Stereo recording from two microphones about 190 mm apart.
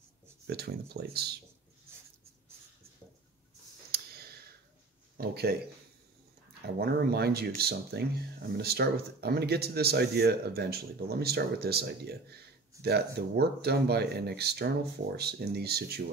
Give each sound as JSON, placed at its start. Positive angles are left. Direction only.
{"t": 0.5, "sound": "speech", "side_deg": -60}
{"t": 3.9, "sound": "sigh", "side_deg": -55}
{"t": 5.1, "sound": "speech", "side_deg": -55}
{"t": 6.8, "sound": "speech", "side_deg": -55}